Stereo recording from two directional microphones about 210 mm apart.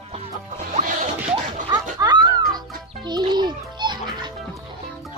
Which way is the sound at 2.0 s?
20° right (ahead or behind).